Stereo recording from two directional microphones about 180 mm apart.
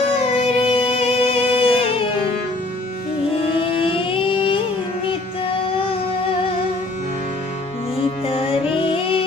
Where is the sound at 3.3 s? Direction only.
30° left (ahead or behind).